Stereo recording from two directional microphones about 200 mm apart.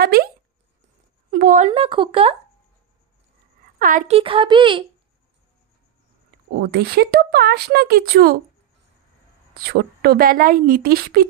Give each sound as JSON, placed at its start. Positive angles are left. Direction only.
{"t": 0.0, "sound": "speech", "side_deg": -50}
{"t": 1.3, "sound": "a woman's voice", "side_deg": -40}
{"t": 3.8, "sound": "speech", "side_deg": -40}
{"t": 4.2, "sound": "a woman's voice", "side_deg": -25}
{"t": 6.6, "sound": "speech", "side_deg": -50}
{"t": 9.5, "sound": "speech", "side_deg": -50}